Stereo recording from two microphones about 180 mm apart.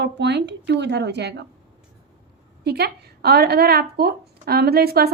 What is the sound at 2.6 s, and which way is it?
A woman's voice, 65° right (ahead or behind).